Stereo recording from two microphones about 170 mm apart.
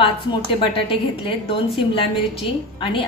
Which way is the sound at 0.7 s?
30° left (ahead or behind).